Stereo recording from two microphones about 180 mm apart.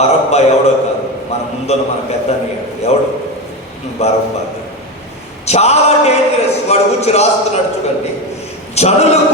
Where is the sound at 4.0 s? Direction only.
35° left (ahead or behind).